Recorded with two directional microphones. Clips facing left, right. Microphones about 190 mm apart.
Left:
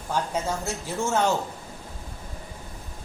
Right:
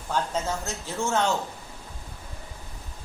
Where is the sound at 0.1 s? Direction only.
10° left (ahead or behind).